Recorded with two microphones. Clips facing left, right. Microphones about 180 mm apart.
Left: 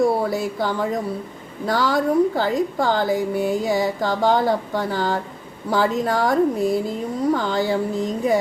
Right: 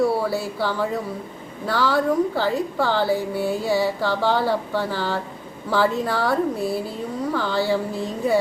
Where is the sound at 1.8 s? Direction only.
15° left (ahead or behind).